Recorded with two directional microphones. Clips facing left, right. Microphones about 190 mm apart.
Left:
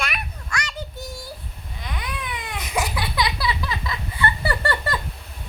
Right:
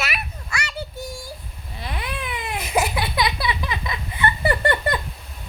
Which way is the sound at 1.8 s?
30° right (ahead or behind).